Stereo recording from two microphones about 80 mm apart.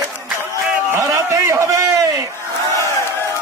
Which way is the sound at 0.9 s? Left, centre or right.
Right.